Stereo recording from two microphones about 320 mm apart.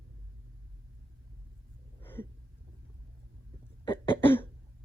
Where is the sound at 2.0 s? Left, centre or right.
Centre.